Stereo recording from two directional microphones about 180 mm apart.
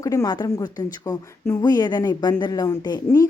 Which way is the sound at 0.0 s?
20° left (ahead or behind).